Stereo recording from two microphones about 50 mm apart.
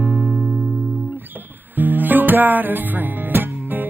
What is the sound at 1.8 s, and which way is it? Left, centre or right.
Music, right.